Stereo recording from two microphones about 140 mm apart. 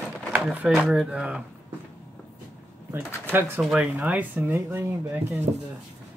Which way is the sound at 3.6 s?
5° right (ahead or behind).